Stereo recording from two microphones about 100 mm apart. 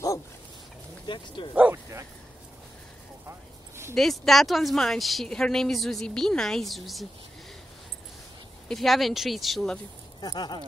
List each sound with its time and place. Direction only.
1.0 s speech: 55° left (ahead or behind)
1.5 s speech: 15° right (ahead or behind)
3.3 s a sound: 25° right (ahead or behind)
3.9 s a woman's voice: 5° left (ahead or behind)
8.6 s a woman's voice: centre (ahead or behind)
10.2 s speech: 45° left (ahead or behind)